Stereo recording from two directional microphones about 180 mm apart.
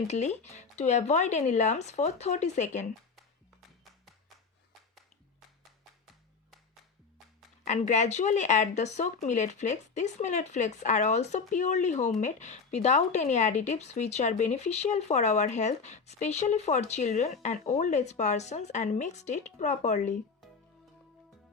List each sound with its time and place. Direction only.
0.1 s speech: 40° left (ahead or behind)
7.6 s speech: 40° left (ahead or behind)